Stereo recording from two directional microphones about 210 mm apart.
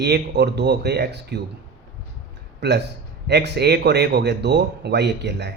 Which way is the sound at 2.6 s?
55° right (ahead or behind).